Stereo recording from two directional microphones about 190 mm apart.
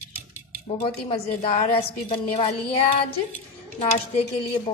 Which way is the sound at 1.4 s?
30° left (ahead or behind).